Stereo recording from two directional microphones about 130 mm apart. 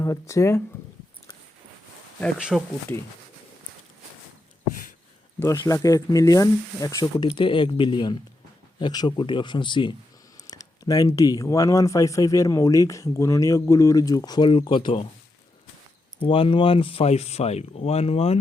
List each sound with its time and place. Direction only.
0.0 s speech: 25° left (ahead or behind)
2.4 s speech: 5° right (ahead or behind)
5.4 s speech: 25° left (ahead or behind)
7.3 s speech: 40° left (ahead or behind)
16.2 s speech: 45° left (ahead or behind)